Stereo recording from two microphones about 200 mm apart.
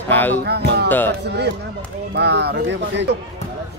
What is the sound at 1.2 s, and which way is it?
Speech, 55° right (ahead or behind).